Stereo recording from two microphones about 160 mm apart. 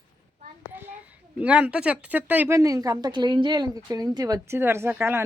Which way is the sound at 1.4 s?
10° right (ahead or behind).